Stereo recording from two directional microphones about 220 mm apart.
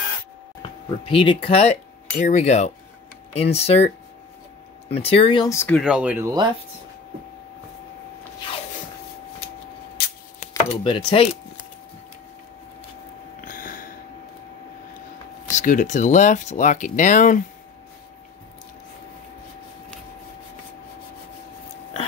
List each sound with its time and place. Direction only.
0.6 s speech: 25° left (ahead or behind)
5.8 s speech: 5° right (ahead or behind)
10.5 s speech: 20° left (ahead or behind)
13.4 s a sound: 40° left (ahead or behind)
15.5 s speech: 35° left (ahead or behind)